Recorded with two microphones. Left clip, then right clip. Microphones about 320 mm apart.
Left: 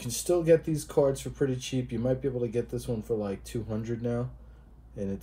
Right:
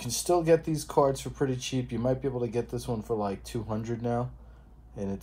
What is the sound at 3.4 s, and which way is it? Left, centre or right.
Speech, centre.